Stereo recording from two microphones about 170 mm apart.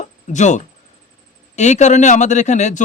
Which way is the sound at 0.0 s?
45° left (ahead or behind).